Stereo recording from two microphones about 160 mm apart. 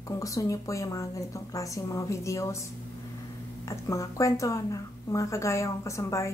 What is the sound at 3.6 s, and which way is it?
Speech, 20° left (ahead or behind).